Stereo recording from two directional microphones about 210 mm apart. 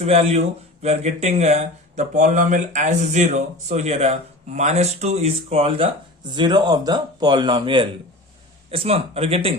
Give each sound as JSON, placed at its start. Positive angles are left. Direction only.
{"t": 0.0, "sound": "speech", "side_deg": -30}